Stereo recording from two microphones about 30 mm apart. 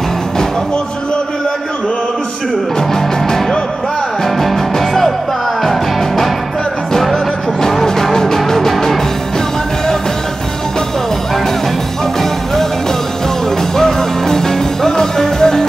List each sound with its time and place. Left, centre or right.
4.4 s music: centre
7.8 s music: centre
13.7 s music: centre